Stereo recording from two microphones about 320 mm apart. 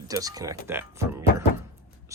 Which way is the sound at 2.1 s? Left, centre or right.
Centre.